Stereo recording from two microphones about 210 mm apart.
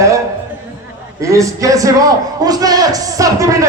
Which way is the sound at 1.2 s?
15° right (ahead or behind).